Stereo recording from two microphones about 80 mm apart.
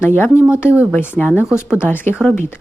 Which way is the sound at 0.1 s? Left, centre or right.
Left.